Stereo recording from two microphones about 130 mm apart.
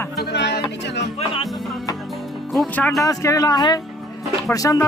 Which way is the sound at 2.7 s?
10° left (ahead or behind).